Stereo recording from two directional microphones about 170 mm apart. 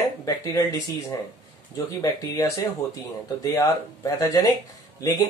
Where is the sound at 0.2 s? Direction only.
20° left (ahead or behind).